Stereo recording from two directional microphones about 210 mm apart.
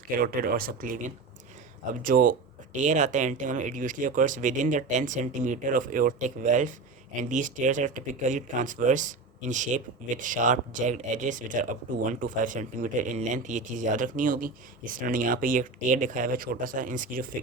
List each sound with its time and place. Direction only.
0.2 s speech: 45° right (ahead or behind)